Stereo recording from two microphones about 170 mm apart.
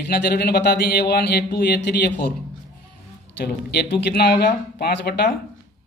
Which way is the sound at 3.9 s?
70° left (ahead or behind).